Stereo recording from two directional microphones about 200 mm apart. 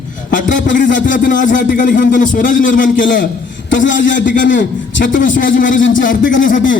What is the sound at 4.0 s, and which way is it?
A man's voice, 40° left (ahead or behind).